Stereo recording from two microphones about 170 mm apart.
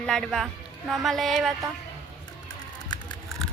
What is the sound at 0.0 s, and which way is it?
A woman's voice, 5° left (ahead or behind).